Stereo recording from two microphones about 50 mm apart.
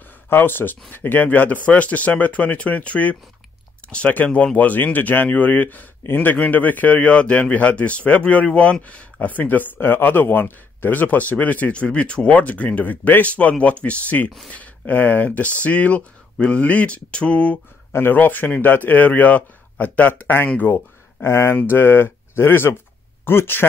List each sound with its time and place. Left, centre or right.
0.3 s speech: left
18.1 s speech: left
20.7 s speech: left